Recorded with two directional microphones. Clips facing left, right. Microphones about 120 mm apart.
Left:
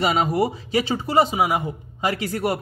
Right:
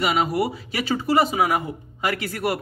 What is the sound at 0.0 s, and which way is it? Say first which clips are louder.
Speech: left 1 dB; 30° left (ahead or behind).